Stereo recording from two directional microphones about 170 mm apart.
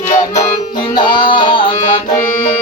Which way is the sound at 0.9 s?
30° left (ahead or behind).